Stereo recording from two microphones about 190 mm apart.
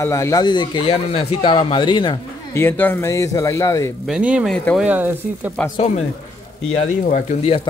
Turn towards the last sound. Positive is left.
turn(degrees=35)  # may be behind; listen again after turning